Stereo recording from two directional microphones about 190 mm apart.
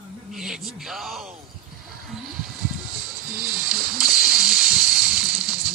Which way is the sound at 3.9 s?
Centre (ahead or behind).